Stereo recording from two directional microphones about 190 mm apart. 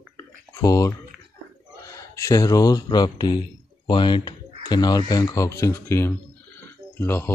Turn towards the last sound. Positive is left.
turn(degrees=15)  # may be behind; listen again after turning